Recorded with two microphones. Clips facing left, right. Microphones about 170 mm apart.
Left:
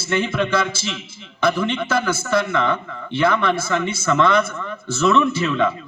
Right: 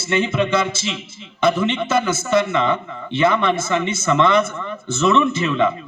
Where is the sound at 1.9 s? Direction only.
20° right (ahead or behind).